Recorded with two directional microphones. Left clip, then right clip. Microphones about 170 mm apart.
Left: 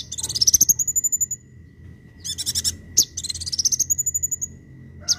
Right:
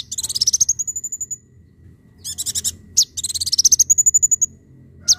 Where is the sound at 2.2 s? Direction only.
20° right (ahead or behind).